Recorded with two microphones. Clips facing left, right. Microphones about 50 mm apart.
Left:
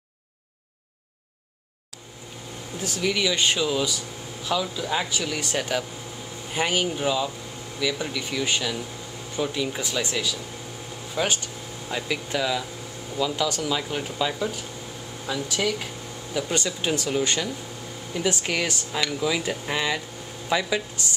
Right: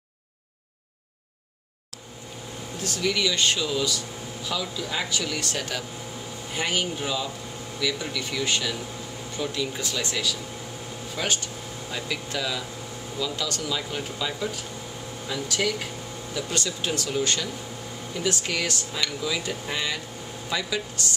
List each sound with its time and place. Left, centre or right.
2.8 s speech: centre